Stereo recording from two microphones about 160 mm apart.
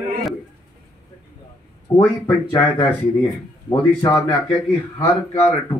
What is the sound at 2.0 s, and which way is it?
Speech, 20° left (ahead or behind).